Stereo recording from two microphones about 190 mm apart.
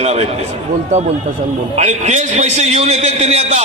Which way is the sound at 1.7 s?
35° right (ahead or behind).